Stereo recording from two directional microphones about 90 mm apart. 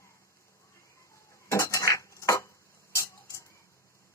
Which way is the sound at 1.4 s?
35° left (ahead or behind).